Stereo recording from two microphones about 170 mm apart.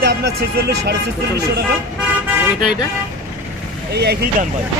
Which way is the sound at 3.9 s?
75° right (ahead or behind).